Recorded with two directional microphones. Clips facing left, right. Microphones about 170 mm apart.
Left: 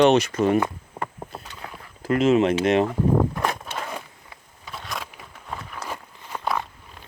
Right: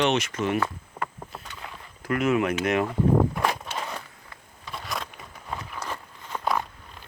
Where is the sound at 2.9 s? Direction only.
Centre (ahead or behind).